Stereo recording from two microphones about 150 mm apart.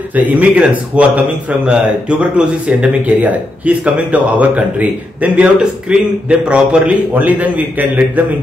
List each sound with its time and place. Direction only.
0.1 s speech: 10° right (ahead or behind)